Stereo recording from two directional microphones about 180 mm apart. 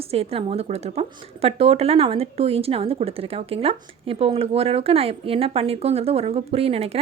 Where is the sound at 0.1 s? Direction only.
35° right (ahead or behind).